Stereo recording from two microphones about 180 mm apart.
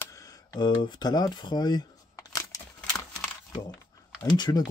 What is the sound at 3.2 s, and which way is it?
Crumpling, 5° left (ahead or behind).